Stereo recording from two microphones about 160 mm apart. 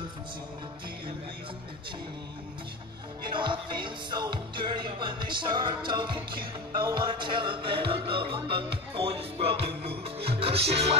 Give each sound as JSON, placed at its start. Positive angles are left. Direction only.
{"t": 3.3, "sound": "music", "side_deg": -30}